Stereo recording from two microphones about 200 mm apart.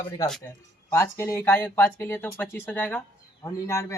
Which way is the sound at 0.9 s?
15° left (ahead or behind).